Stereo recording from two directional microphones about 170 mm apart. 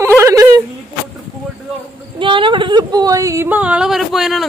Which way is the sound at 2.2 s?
30° right (ahead or behind).